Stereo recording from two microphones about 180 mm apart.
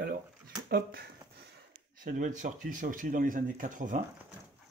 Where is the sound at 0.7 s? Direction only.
60° right (ahead or behind).